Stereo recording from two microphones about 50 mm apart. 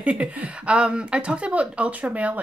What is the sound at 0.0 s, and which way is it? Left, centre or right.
Speech, right.